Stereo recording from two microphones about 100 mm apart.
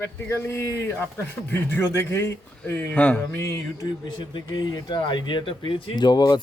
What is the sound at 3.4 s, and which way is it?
Speech, 35° left (ahead or behind).